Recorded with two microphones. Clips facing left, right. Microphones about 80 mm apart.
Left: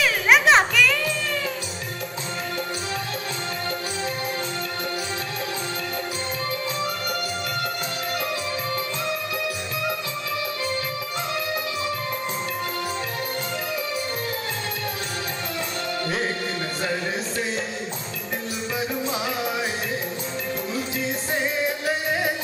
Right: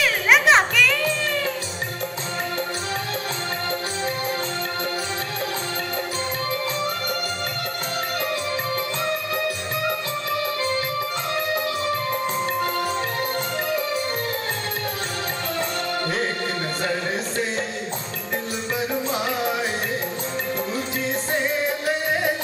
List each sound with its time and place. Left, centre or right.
0.0 s music: centre
21.3 s music: centre